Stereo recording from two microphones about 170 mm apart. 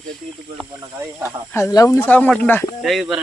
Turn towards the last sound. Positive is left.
turn(degrees=0)  # may be behind; listen again after turning